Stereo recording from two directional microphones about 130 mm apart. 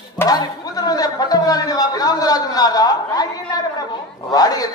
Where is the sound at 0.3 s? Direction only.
30° left (ahead or behind).